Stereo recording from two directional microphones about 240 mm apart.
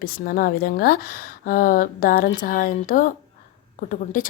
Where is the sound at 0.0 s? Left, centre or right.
Left.